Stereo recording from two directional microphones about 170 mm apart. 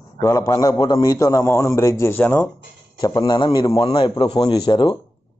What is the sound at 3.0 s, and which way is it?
Speech, 20° left (ahead or behind).